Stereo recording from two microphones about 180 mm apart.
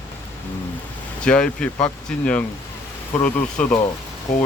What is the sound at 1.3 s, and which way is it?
Speech, 5° left (ahead or behind).